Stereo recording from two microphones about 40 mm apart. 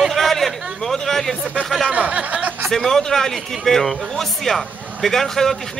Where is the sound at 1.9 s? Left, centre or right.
Right.